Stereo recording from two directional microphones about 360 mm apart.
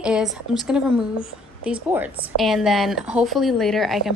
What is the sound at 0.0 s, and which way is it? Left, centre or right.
A woman's voice, centre.